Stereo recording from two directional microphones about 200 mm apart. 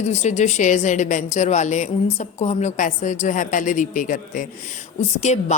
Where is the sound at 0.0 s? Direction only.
35° left (ahead or behind).